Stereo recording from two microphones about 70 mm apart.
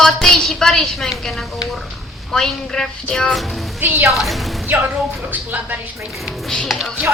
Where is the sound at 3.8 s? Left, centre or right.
Right.